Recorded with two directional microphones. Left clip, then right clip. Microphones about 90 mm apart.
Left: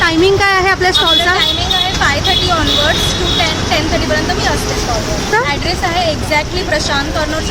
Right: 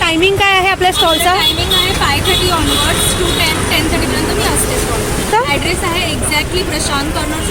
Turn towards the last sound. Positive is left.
turn(degrees=30)  # may be behind; listen again after turning